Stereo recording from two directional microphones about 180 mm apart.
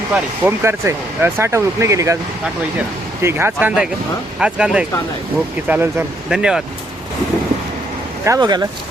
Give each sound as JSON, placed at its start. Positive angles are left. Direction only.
{"t": 0.1, "sound": "speech", "side_deg": -10}
{"t": 3.2, "sound": "speech", "side_deg": -15}
{"t": 8.2, "sound": "speech", "side_deg": -20}